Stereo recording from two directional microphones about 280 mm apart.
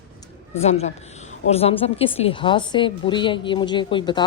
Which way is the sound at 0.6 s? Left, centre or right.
Left.